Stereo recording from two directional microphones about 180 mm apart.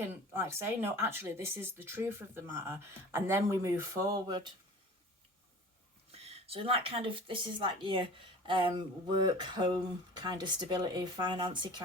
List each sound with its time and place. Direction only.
0.3 s speech: 10° right (ahead or behind)
6.1 s speech: 35° right (ahead or behind)